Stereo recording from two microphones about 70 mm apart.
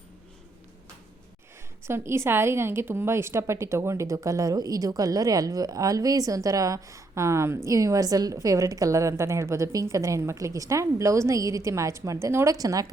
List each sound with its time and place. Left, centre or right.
1.9 s a woman's voice: right
4.5 s a woman's voice: right
12.5 s speech: right